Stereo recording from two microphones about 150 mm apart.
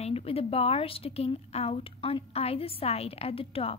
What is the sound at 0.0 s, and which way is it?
A woman's voice, 40° left (ahead or behind).